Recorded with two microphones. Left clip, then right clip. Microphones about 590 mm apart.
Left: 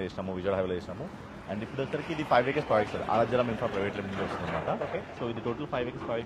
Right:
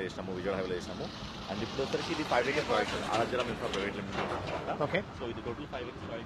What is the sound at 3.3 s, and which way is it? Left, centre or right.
Speech, left.